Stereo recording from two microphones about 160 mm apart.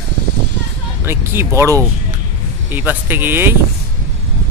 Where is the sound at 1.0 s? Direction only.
15° right (ahead or behind).